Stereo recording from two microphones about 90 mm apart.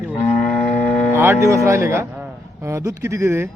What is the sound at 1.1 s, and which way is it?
A man's voice, 25° right (ahead or behind).